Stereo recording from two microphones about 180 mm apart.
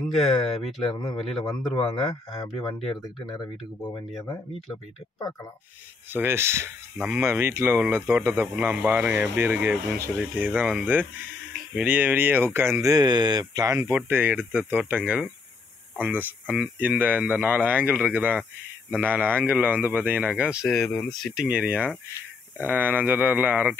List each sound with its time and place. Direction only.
0.2 s speech: 30° left (ahead or behind)
1.2 s a man's voice: centre (ahead or behind)
3.3 s speech: 20° left (ahead or behind)
6.1 s speech: 15° right (ahead or behind)